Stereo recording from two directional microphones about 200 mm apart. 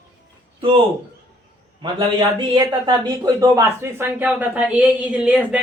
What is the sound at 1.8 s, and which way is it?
Speech, 25° right (ahead or behind).